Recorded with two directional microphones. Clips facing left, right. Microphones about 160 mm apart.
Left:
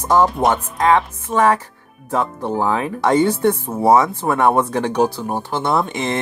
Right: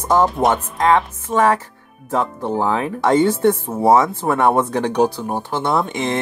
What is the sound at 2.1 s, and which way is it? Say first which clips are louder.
Speech: even; 20° right (ahead or behind).